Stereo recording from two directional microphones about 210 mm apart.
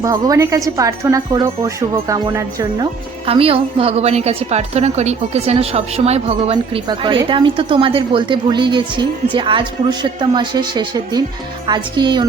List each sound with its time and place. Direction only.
0.0 s a woman's voice: 15° right (ahead or behind)